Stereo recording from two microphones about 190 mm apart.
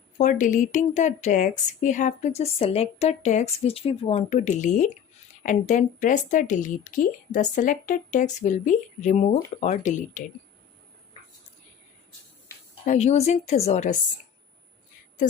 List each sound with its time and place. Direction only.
0.2 s speech: 40° left (ahead or behind)
12.8 s speech: 40° left (ahead or behind)
15.2 s speech: 45° left (ahead or behind)